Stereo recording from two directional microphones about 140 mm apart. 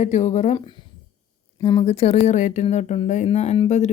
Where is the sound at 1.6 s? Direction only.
30° left (ahead or behind).